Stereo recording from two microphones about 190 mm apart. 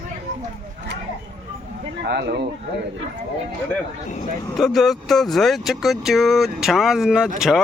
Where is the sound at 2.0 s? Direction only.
60° right (ahead or behind).